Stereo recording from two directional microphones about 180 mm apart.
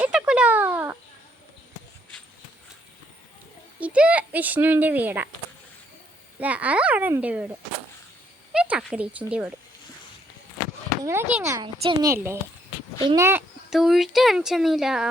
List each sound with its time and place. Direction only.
0.0 s a sound: 5° right (ahead or behind)
3.8 s speech: 5° right (ahead or behind)
6.4 s a child's voice: 5° right (ahead or behind)
8.5 s speech: 5° right (ahead or behind)
11.0 s a child's voice: 15° right (ahead or behind)
13.7 s speech: centre (ahead or behind)